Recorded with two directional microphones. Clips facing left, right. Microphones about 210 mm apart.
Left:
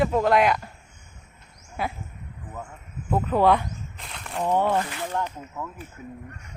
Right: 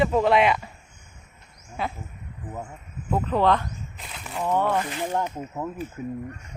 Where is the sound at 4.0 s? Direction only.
Centre (ahead or behind).